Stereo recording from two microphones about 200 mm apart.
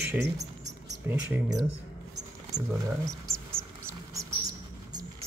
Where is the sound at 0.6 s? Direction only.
10° right (ahead or behind).